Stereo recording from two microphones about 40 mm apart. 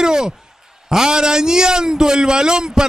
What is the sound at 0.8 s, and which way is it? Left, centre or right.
A man's voice, centre.